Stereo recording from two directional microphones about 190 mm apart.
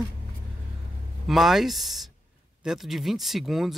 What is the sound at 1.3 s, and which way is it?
Speech, centre (ahead or behind).